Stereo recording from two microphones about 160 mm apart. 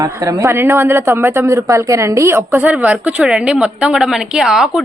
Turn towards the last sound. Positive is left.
turn(degrees=-5)  # may be behind; listen again after turning